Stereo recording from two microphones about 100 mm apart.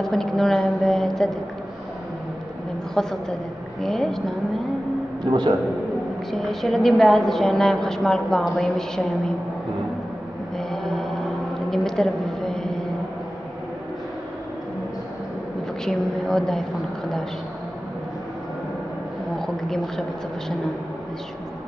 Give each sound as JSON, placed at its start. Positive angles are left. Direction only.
{"t": 0.0, "sound": "a woman's voice", "side_deg": 5}
{"t": 2.9, "sound": "a woman's voice", "side_deg": 5}
{"t": 5.2, "sound": "a man's voice", "side_deg": -45}
{"t": 6.3, "sound": "a woman's voice", "side_deg": 5}
{"t": 10.7, "sound": "mantra", "side_deg": 5}
{"t": 11.7, "sound": "a sound", "side_deg": 5}
{"t": 15.8, "sound": "a woman's voice", "side_deg": 5}
{"t": 19.3, "sound": "a woman's voice", "side_deg": 5}